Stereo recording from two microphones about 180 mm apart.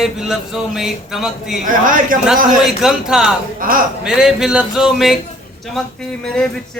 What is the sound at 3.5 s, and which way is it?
Speech, 50° right (ahead or behind).